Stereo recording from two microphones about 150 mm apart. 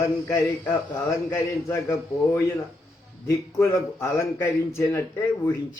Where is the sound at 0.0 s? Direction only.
20° left (ahead or behind).